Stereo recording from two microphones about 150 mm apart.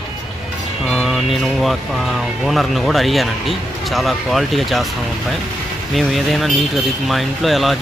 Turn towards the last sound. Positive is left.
turn(degrees=0)  # may be behind; listen again after turning